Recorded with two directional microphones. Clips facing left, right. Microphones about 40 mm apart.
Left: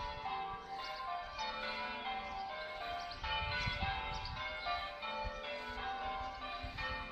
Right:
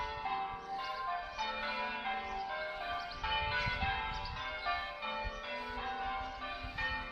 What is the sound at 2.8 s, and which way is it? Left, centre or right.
Church bell, centre.